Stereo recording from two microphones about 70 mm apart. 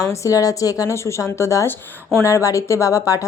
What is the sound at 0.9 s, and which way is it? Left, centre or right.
A woman's voice, left.